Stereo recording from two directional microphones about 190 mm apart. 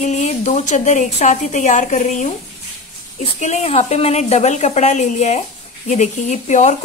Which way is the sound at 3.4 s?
35° left (ahead or behind).